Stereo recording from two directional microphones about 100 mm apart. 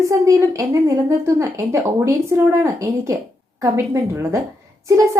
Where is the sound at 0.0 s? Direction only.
30° right (ahead or behind).